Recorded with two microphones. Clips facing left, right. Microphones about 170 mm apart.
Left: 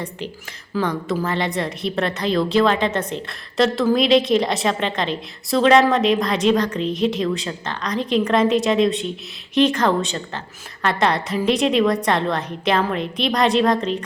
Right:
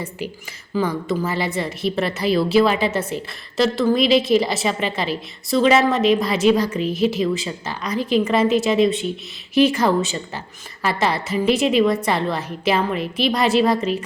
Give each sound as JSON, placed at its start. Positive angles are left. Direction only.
{"t": 0.7, "sound": "a woman's voice", "side_deg": -5}